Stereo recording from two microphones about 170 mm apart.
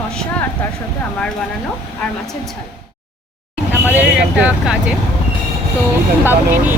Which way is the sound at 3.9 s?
5° right (ahead or behind).